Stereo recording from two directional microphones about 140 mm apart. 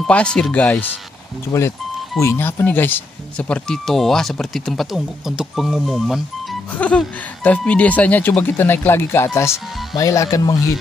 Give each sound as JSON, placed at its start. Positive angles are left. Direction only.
{"t": 0.0, "sound": "speech", "side_deg": 5}
{"t": 1.5, "sound": "speech", "side_deg": 20}
{"t": 6.7, "sound": "speech", "side_deg": 10}